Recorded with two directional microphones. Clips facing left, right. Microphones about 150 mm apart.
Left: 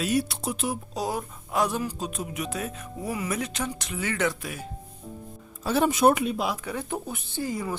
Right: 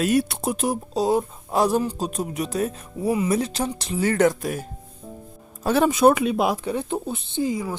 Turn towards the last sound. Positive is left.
turn(degrees=-20)  # may be behind; listen again after turning